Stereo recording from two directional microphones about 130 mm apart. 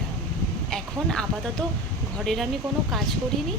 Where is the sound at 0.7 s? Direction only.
5° left (ahead or behind).